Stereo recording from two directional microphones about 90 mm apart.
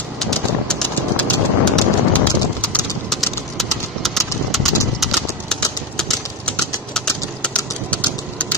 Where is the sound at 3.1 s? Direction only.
5° left (ahead or behind).